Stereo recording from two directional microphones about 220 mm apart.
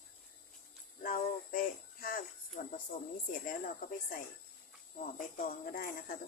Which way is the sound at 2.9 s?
40° left (ahead or behind).